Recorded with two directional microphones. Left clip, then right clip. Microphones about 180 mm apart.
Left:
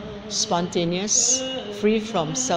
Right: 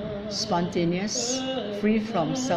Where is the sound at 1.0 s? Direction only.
20° left (ahead or behind).